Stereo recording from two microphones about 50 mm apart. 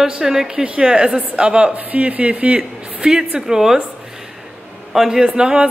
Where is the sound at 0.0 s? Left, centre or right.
Centre; by 2.6 s right.